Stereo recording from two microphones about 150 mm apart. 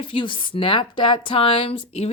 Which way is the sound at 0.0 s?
35° left (ahead or behind).